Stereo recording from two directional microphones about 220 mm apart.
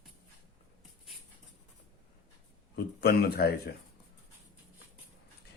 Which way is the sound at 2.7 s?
45° left (ahead or behind).